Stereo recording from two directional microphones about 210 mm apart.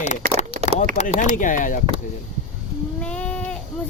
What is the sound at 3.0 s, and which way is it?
Goat, 5° left (ahead or behind).